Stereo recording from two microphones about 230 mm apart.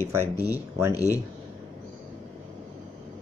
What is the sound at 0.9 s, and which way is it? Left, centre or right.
Speech, centre.